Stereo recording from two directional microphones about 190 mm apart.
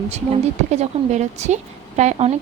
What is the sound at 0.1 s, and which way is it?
A woman's voice, 35° right (ahead or behind).